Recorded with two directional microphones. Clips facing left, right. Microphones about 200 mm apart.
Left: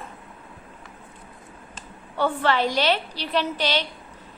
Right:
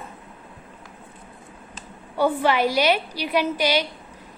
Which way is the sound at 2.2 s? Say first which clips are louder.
Right 2 dB; 10° right (ahead or behind).